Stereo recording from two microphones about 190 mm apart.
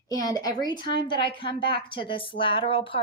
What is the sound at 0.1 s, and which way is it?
A woman's voice, 20° left (ahead or behind).